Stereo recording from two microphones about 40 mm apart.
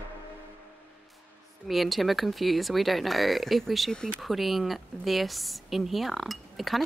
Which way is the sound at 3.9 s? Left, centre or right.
Centre.